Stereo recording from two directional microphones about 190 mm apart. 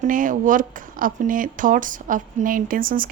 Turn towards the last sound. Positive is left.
turn(degrees=-50)  # may be behind; listen again after turning